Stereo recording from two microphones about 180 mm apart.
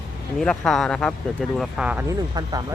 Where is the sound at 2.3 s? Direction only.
20° right (ahead or behind).